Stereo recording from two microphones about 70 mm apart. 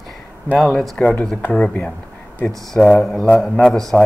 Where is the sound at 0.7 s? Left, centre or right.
Centre.